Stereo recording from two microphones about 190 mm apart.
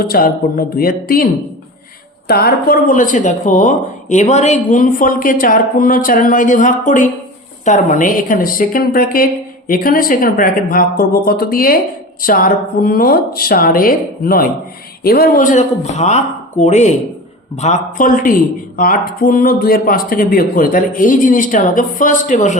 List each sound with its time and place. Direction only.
0.0 s speech: 50° left (ahead or behind)